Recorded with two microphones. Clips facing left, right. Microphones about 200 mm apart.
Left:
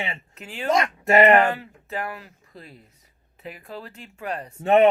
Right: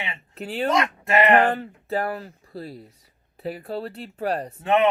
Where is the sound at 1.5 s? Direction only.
35° right (ahead or behind).